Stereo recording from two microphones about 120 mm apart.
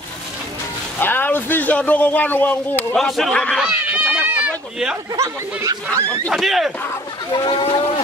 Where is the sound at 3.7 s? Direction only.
15° right (ahead or behind).